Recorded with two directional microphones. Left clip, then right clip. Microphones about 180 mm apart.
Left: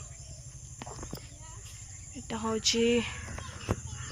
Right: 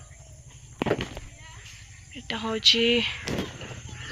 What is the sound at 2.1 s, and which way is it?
Speech, centre (ahead or behind).